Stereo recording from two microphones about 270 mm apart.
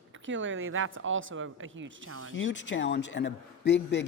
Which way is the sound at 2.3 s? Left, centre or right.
Left.